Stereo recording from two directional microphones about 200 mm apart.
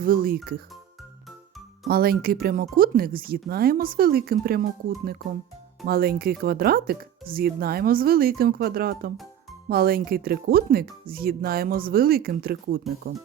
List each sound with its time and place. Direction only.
0.0 s speech: 45° right (ahead or behind)
1.9 s speech: 50° right (ahead or behind)